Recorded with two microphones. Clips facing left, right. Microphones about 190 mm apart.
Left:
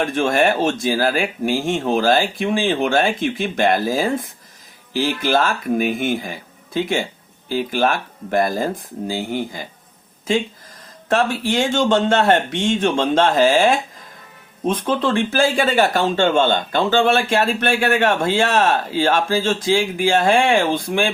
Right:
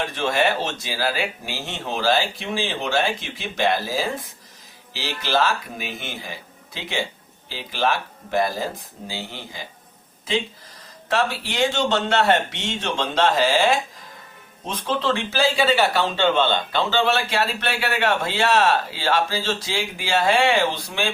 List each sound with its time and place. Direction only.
0.0 s speech: 50° left (ahead or behind)
11.1 s speech: 50° left (ahead or behind)